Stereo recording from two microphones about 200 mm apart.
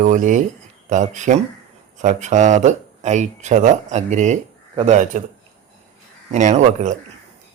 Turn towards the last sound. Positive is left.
turn(degrees=-40)  # may be behind; listen again after turning